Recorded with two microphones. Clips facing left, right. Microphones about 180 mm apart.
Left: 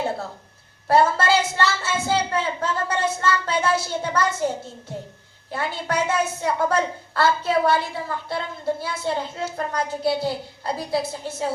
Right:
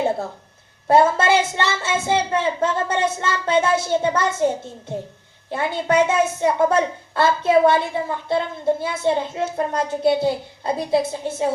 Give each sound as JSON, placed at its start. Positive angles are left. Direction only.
{"t": 0.9, "sound": "a woman's voice", "side_deg": -20}
{"t": 5.5, "sound": "a woman's voice", "side_deg": -20}